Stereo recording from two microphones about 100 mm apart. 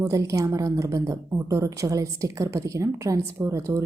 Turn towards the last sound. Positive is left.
turn(degrees=-30)  # may be behind; listen again after turning